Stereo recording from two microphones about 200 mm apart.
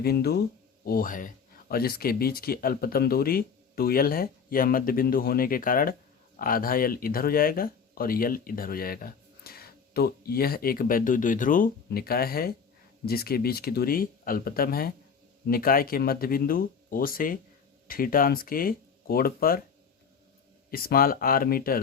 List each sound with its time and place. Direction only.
0.0 s speech: 50° left (ahead or behind)
20.7 s speech: 50° left (ahead or behind)